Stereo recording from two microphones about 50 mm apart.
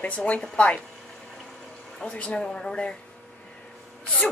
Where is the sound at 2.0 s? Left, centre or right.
Left.